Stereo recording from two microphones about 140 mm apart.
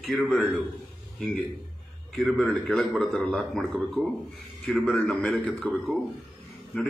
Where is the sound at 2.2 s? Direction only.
Centre (ahead or behind).